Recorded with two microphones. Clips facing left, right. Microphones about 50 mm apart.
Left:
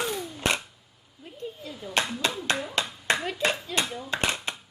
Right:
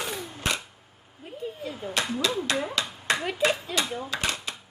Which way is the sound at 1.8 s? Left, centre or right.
Right.